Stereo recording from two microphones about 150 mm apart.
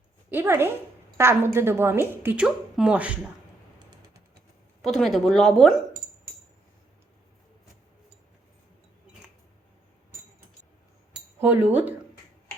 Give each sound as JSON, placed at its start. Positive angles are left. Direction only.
{"t": 0.3, "sound": "a woman's voice", "side_deg": -15}
{"t": 4.8, "sound": "a woman's voice", "side_deg": 0}
{"t": 11.3, "sound": "speech", "side_deg": -15}